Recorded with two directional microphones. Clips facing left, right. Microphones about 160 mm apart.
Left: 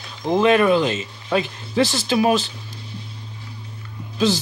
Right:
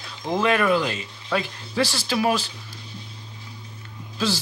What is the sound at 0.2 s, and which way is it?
Speech, 20° left (ahead or behind).